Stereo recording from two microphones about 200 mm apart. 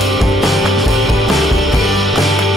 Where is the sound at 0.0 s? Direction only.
Centre (ahead or behind).